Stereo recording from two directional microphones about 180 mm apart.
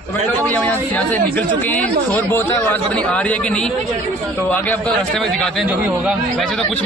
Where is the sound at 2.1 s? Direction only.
10° left (ahead or behind).